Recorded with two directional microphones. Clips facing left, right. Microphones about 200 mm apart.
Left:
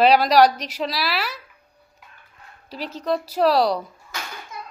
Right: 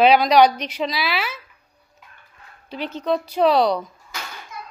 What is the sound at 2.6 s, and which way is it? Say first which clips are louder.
A woman's voice: right 2 dB; centre (ahead or behind).